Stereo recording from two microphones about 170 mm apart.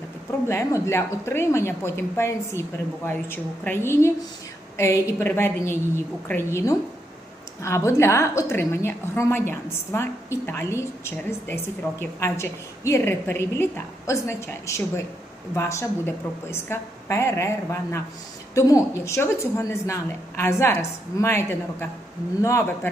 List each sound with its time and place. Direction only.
0.4 s a woman's voice: 15° left (ahead or behind)